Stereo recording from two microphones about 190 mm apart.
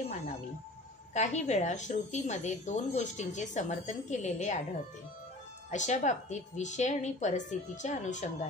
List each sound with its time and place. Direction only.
1.1 s a woman's voice: 35° left (ahead or behind)
5.7 s a woman's voice: 40° left (ahead or behind)